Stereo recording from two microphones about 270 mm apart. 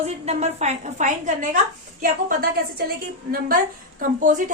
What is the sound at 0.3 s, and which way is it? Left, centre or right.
A woman's voice, right.